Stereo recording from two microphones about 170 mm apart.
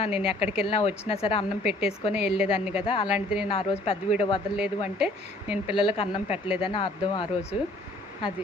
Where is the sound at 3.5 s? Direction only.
35° left (ahead or behind).